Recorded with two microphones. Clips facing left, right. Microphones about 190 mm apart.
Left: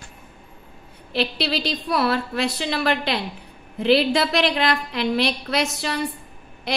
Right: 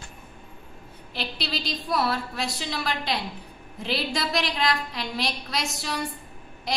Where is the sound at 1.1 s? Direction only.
70° left (ahead or behind).